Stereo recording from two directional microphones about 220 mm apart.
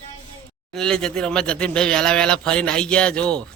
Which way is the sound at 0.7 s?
5° left (ahead or behind).